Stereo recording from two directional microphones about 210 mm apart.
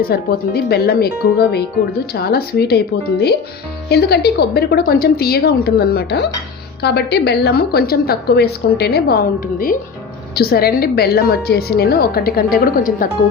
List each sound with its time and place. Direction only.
0.1 s a woman's voice: 50° left (ahead or behind)